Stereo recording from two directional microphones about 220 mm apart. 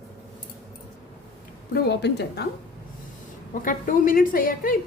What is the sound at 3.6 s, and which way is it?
A woman's voice, 40° left (ahead or behind).